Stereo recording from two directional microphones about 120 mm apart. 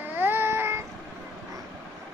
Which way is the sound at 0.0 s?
20° right (ahead or behind).